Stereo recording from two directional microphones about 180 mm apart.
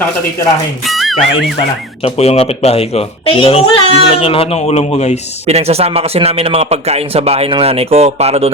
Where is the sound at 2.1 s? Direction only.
35° left (ahead or behind).